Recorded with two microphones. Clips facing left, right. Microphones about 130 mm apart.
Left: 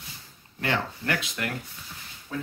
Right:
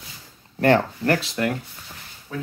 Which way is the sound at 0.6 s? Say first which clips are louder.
Right 10 dB; 45° right (ahead or behind).